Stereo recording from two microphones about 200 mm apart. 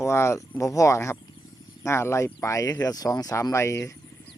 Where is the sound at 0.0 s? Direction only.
15° left (ahead or behind).